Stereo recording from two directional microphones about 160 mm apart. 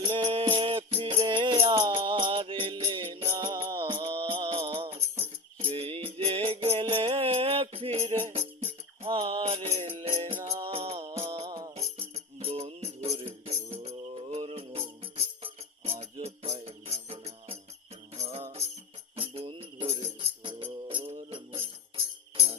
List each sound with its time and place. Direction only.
0.0 s music: 35° right (ahead or behind)
10.1 s music: 20° right (ahead or behind)
10.7 s music: 35° right (ahead or behind)
19.3 s music: 35° right (ahead or behind)
20.8 s jingle bell: 40° right (ahead or behind)